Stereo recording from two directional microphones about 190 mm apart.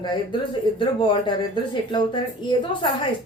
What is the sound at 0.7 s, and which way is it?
A woman's voice, 25° left (ahead or behind).